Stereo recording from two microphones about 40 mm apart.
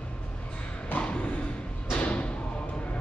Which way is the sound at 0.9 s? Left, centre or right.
Left.